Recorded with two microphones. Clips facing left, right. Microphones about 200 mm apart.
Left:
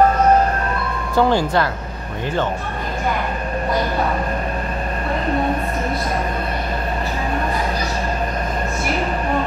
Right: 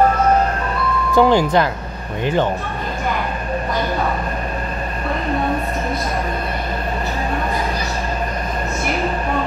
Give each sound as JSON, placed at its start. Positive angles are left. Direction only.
{"t": 1.1, "sound": "speech", "side_deg": -15}